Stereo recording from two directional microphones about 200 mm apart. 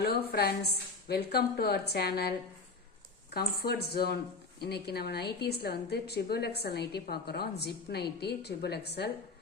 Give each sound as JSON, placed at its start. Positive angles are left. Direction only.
{"t": 0.0, "sound": "a woman's voice", "side_deg": 55}
{"t": 3.3, "sound": "a woman's voice", "side_deg": 50}